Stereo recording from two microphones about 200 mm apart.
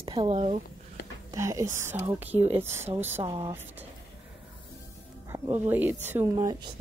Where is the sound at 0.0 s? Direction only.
25° right (ahead or behind).